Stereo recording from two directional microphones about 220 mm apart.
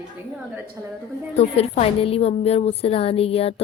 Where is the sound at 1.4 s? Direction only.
30° left (ahead or behind).